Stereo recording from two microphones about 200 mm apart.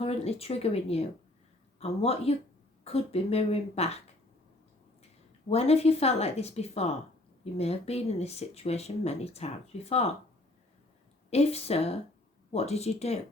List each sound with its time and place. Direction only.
0.0 s speech: 30° left (ahead or behind)
5.5 s speech: 30° left (ahead or behind)
11.3 s speech: 30° left (ahead or behind)